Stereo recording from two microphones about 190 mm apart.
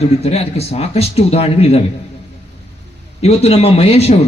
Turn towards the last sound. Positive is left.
turn(degrees=35)  # may be behind; listen again after turning